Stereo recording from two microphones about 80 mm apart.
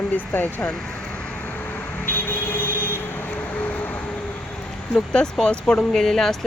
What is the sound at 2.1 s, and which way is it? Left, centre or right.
Vehicle, left.